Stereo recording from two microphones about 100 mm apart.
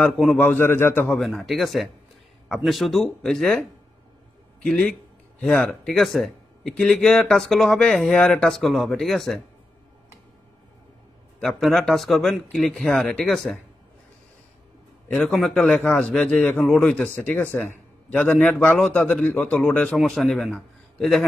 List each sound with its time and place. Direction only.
0.4 s a man's voice: 20° left (ahead or behind)
1.0 s a man's voice: 5° left (ahead or behind)
4.6 s a man's voice: 5° left (ahead or behind)
11.3 s a man's voice: 5° left (ahead or behind)
15.1 s a man's voice: 5° left (ahead or behind)